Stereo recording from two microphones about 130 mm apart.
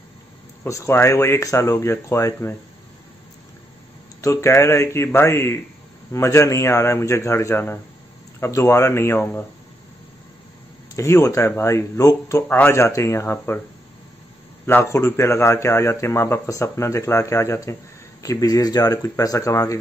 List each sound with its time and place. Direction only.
0.7 s speech: 25° left (ahead or behind)
4.2 s speech: 20° left (ahead or behind)
11.0 s speech: 25° left (ahead or behind)
14.7 s speech: 20° left (ahead or behind)